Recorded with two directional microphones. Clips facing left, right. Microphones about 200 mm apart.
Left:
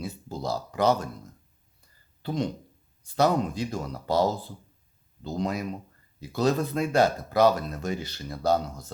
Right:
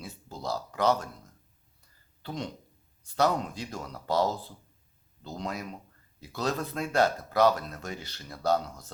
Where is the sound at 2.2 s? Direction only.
10° left (ahead or behind).